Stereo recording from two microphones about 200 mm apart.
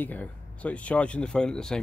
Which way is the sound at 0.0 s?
10° left (ahead or behind).